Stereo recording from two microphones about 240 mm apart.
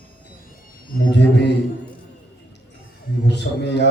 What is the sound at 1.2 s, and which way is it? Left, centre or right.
Speech, left.